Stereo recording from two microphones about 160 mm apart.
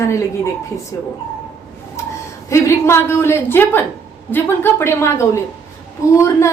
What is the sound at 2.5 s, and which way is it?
A woman's voice, 15° left (ahead or behind).